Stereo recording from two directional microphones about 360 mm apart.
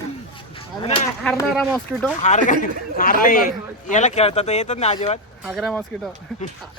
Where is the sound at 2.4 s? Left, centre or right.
Left.